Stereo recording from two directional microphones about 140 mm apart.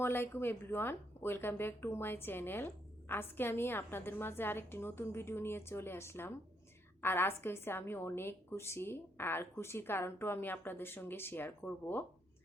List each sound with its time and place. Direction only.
0.0 s a woman's voice: 15° left (ahead or behind)